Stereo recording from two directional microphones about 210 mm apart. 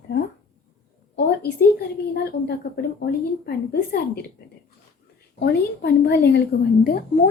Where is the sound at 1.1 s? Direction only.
50° left (ahead or behind).